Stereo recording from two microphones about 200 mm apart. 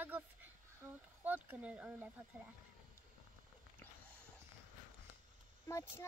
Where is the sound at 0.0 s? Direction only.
10° right (ahead or behind).